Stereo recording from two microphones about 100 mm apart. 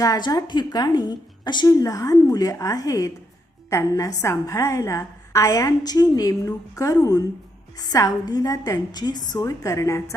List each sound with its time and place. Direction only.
0.0 s a woman's voice: 40° left (ahead or behind)
1.6 s a woman's voice: 35° left (ahead or behind)